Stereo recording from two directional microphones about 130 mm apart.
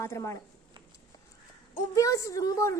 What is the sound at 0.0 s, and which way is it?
Speech, 20° left (ahead or behind).